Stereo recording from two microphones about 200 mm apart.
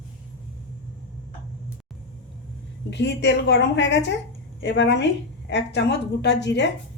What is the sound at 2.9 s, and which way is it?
A woman's voice, 60° left (ahead or behind).